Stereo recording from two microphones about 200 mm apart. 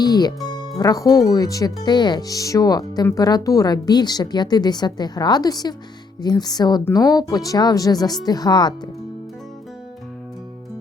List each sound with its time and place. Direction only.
0.0 s speech: 20° left (ahead or behind)